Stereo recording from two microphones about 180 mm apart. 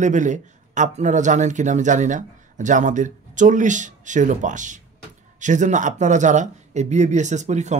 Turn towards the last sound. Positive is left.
turn(degrees=-40)  # may be behind; listen again after turning